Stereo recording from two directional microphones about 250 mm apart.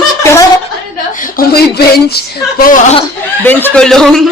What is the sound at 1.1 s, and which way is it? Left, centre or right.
Speech, left.